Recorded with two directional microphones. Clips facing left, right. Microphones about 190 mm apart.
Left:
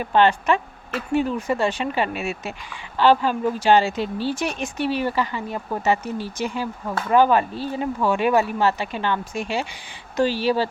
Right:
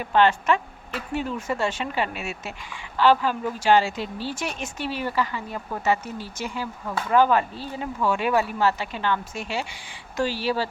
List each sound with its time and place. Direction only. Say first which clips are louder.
0.0 s speech: left 2 dB; 20° left (ahead or behind)
3.0 s speech: left 2 dB; 25° left (ahead or behind)